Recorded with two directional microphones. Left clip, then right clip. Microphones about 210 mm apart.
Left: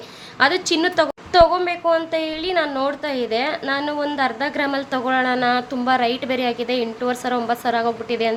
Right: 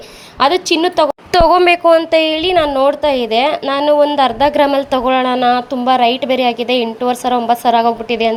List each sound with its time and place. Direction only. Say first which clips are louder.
0.3 s a woman's voice: right 5 dB; 25° right (ahead or behind)
1.3 s a woman's voice: right 6 dB; 45° right (ahead or behind); by 8.4 s 25° right (ahead or behind)